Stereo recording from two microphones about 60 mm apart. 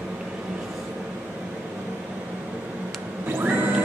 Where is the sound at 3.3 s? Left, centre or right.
Right.